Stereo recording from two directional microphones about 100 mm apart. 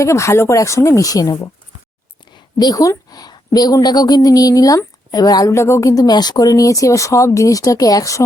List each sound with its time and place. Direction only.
0.0 s speech: 30° left (ahead or behind)
5.5 s speech: 25° left (ahead or behind)